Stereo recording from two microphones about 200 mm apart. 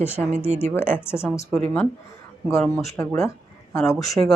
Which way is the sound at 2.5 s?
5° left (ahead or behind).